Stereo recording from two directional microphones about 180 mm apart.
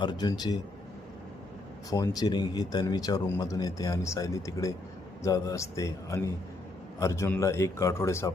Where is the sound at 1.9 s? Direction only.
20° left (ahead or behind).